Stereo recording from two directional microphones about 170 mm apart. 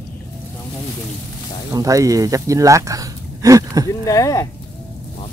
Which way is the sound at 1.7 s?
20° right (ahead or behind).